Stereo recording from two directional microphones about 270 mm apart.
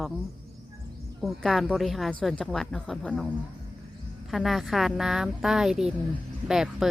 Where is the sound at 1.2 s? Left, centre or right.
Centre.